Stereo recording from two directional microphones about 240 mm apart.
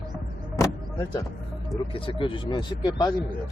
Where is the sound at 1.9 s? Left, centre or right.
Left.